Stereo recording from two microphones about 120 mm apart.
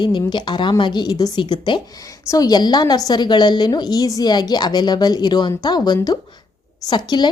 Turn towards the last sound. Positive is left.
turn(degrees=35)  # may be behind; listen again after turning